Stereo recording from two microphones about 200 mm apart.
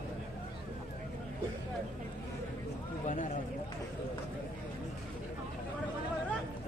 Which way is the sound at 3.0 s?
40° left (ahead or behind).